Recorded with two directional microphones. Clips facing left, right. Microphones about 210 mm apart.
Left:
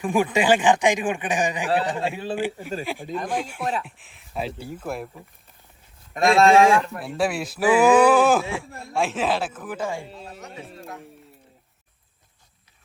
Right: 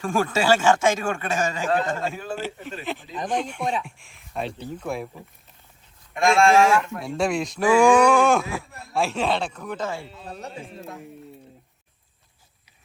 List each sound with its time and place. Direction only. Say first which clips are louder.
0.0 s a man's voice: left 2 dB; 20° left (ahead or behind)
6.1 s speech: left 2 dB; 35° left (ahead or behind)
6.9 s speech: right 1 dB; centre (ahead or behind)